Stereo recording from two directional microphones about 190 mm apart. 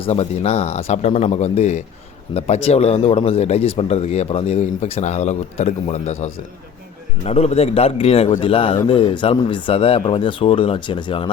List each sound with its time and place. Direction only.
0.0 s a man's voice: 30° left (ahead or behind)